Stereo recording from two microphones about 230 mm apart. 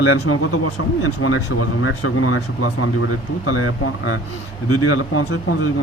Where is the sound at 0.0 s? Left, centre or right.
Left.